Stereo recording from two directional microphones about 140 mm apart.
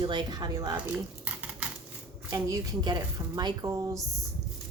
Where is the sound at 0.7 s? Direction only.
10° right (ahead or behind).